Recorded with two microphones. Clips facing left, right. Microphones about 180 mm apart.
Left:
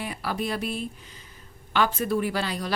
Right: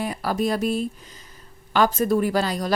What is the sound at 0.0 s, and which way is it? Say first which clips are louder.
A woman's voice: right 6 dB; 40° right (ahead or behind).